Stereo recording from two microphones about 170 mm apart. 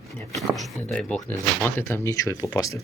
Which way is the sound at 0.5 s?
Centre (ahead or behind).